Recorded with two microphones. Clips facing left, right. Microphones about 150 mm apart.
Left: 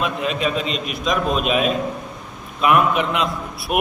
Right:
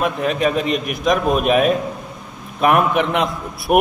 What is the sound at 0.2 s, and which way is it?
A man's voice, 55° right (ahead or behind).